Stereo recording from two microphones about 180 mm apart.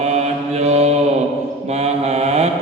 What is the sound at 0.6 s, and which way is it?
Mantra, 35° right (ahead or behind).